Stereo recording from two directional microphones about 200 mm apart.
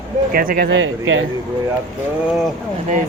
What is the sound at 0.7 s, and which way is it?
Speech, 80° right.